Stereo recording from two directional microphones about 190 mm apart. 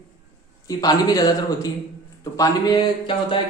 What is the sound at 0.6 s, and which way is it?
Speech, 20° left (ahead or behind).